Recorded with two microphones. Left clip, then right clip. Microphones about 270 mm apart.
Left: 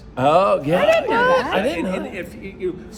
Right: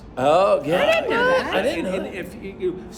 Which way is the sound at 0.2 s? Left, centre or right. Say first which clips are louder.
Left 1 dB; left.